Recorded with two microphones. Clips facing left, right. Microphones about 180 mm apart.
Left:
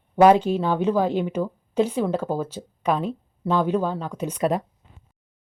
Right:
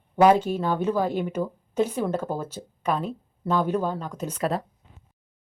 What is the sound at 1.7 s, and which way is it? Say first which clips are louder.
Speech: left 3 dB; 10° left (ahead or behind).